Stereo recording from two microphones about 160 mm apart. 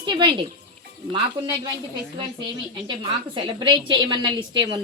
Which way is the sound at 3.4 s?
30° right (ahead or behind).